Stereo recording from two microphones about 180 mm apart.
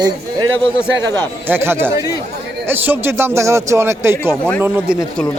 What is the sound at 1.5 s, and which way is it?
A man's voice, 10° right (ahead or behind).